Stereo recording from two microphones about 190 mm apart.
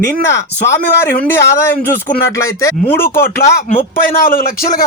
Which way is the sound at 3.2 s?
50° left (ahead or behind).